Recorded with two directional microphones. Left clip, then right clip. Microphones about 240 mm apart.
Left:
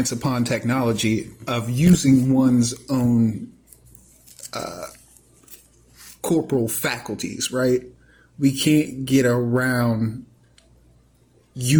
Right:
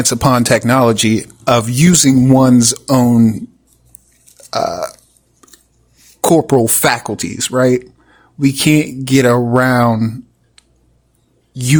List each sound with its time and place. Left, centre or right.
0.0 s speech: right
4.5 s speech: right
6.2 s speech: right
11.5 s speech: right